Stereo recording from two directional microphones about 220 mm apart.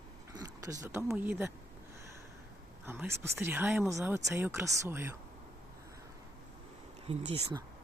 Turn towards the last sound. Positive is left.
turn(degrees=-25)  # may be behind; listen again after turning